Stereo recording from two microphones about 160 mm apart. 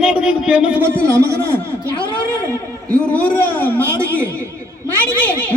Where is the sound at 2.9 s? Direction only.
10° left (ahead or behind).